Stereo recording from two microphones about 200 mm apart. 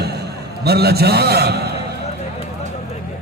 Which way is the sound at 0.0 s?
55° right (ahead or behind).